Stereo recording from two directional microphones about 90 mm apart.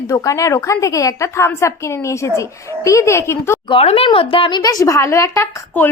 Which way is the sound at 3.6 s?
90° left.